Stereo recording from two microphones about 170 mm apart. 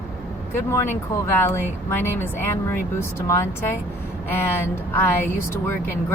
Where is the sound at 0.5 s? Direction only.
15° left (ahead or behind).